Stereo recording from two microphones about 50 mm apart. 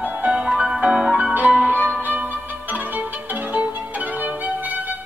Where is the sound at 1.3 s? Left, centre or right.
Right.